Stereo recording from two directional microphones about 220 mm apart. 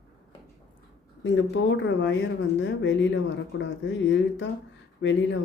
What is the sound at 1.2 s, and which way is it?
Speech, 60° left (ahead or behind).